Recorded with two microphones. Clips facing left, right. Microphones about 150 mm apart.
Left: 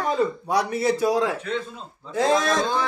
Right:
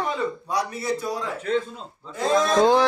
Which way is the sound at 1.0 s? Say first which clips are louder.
Left 7 dB; 90° left.